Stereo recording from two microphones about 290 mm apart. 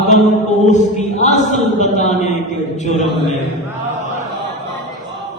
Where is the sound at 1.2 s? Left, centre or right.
Left.